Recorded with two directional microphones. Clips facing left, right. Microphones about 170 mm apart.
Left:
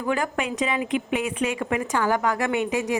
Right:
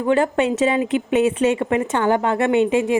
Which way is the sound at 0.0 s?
30° right (ahead or behind).